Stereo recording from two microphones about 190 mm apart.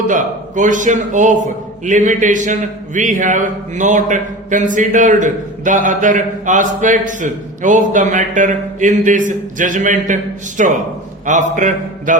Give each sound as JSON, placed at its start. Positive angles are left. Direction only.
{"t": 0.1, "sound": "a man's voice", "side_deg": -40}